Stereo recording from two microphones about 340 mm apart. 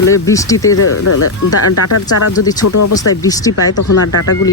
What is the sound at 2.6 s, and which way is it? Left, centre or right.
Speech, left.